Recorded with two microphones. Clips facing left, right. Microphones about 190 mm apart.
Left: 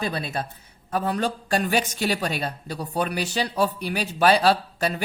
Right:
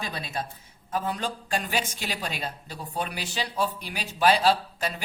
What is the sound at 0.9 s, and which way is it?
A man's voice, 65° left (ahead or behind).